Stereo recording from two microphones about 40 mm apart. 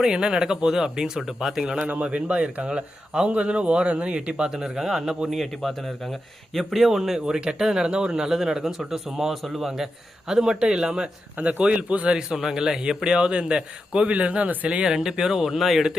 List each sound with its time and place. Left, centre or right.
0.0 s a man's voice: centre
2.0 s speech: right
2.6 s a man's voice: centre
3.2 s speech: right; by 5.3 s centre
5.3 s a man's voice: centre
11.3 s speech: right
12.1 s a man's voice: centre
14.9 s a man's voice: centre